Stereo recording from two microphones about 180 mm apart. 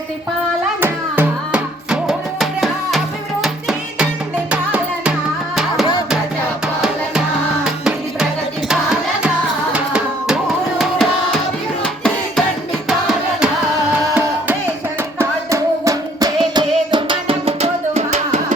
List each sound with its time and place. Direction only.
0.8 s music: 10° right (ahead or behind)
7.6 s music: 5° right (ahead or behind); by 18.5 s 40° right (ahead or behind)